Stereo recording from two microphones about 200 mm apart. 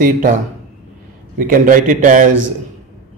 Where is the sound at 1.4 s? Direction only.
45° right (ahead or behind).